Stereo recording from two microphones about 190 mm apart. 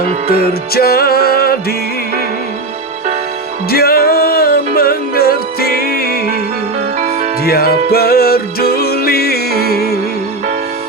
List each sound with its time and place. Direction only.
0.3 s music: 55° left (ahead or behind)
3.7 s music: 55° left (ahead or behind)
7.4 s music: 55° left (ahead or behind)